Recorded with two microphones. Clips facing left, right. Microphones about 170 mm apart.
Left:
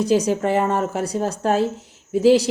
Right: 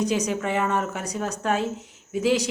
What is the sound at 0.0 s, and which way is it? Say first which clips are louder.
Speech: left 6 dB; 30° left (ahead or behind).